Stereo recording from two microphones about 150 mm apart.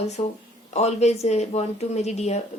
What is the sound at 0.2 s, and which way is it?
Speech, 35° left (ahead or behind).